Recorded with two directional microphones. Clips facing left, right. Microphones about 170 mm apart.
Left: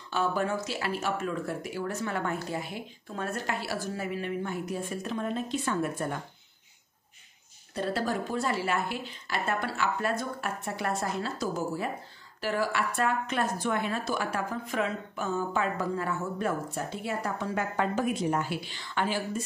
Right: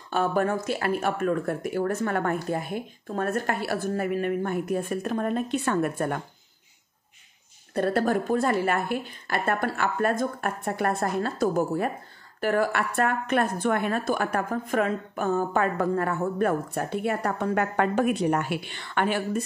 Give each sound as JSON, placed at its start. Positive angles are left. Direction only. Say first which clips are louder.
{"t": 0.1, "sound": "a woman's voice", "louder": "right 4 dB", "side_deg": -50}
{"t": 7.7, "sound": "a woman's voice", "louder": "right 6 dB", "side_deg": -55}